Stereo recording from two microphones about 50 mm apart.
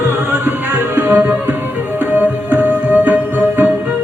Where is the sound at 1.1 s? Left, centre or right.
Right.